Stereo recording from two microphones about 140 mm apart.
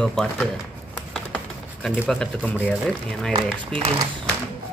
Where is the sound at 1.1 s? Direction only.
5° left (ahead or behind).